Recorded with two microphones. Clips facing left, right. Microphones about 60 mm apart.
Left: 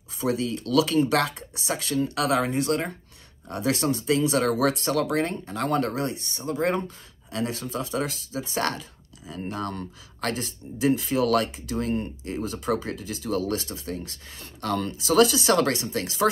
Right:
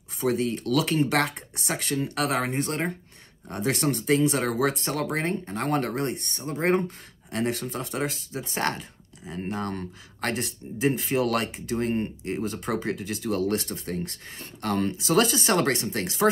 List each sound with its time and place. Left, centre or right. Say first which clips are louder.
0.2 s speech: right 1 dB; right